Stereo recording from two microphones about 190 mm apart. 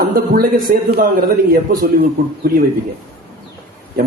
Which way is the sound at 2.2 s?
45° right (ahead or behind).